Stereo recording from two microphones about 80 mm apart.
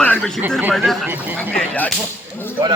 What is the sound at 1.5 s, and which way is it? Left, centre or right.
Speech, centre.